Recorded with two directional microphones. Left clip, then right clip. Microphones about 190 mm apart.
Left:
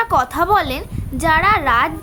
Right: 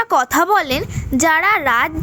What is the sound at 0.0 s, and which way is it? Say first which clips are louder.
A woman's voice: right 1 dB; 35° right (ahead or behind).